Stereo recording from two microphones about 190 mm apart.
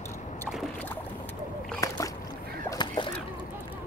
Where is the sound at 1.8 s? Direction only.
15° left (ahead or behind).